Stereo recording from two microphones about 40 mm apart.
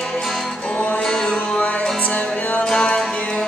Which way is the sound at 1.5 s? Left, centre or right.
Left.